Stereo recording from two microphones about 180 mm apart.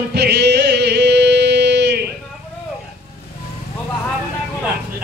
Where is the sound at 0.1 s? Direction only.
65° right (ahead or behind).